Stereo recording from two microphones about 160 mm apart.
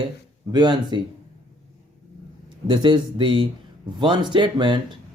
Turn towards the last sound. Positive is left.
turn(degrees=-30)  # may be behind; listen again after turning